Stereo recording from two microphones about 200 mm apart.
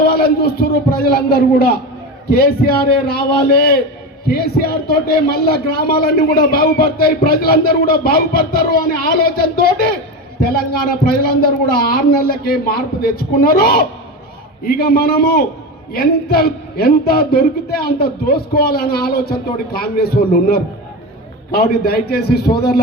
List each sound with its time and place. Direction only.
0.0 s speech: 50° left (ahead or behind)
3.1 s speech: 50° left (ahead or behind)